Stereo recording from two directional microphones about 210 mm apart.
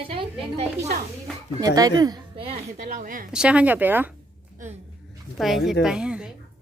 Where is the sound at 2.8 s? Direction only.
40° right (ahead or behind).